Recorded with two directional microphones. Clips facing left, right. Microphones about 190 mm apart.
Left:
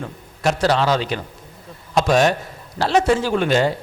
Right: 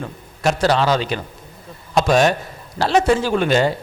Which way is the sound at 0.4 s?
15° right (ahead or behind).